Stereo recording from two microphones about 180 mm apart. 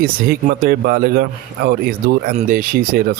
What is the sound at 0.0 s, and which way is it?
Speech, 55° right (ahead or behind).